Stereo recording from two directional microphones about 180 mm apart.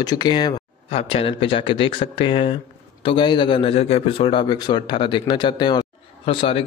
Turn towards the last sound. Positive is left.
turn(degrees=30)  # may be behind; listen again after turning